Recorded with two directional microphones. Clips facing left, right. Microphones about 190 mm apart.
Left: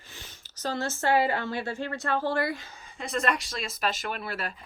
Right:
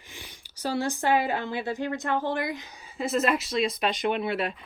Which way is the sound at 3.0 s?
5° right (ahead or behind).